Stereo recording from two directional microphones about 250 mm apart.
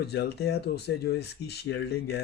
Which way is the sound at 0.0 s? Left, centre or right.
Left.